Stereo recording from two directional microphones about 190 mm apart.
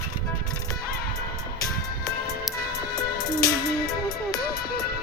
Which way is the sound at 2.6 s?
55° left (ahead or behind).